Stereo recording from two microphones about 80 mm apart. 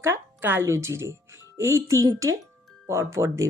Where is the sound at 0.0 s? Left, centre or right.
Right.